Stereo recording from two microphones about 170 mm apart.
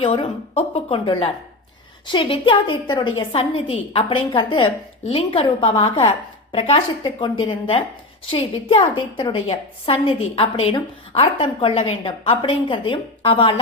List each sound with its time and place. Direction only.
0.0 s a woman's voice: 35° left (ahead or behind)